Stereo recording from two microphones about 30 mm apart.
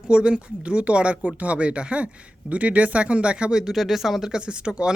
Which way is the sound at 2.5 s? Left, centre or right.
Right.